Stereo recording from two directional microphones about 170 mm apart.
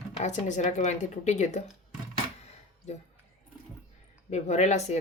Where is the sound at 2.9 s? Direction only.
40° left (ahead or behind).